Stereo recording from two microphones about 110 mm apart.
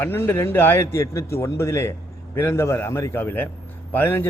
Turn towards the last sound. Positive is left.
turn(degrees=20)  # may be behind; listen again after turning